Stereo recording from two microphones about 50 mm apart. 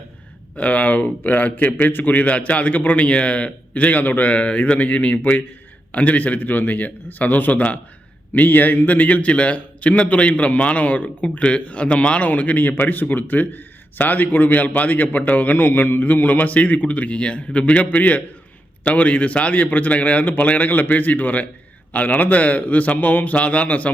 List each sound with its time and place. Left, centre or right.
0.5 s a man's voice: left